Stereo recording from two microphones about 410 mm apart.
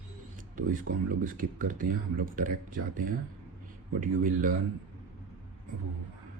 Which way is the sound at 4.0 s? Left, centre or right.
Centre.